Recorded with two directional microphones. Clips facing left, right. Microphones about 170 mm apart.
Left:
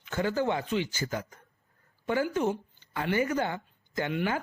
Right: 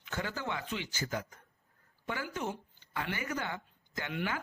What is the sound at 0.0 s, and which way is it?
Speech, 35° left (ahead or behind).